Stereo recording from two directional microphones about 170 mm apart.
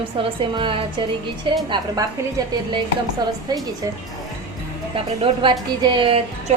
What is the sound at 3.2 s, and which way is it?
Speech, 25° right (ahead or behind).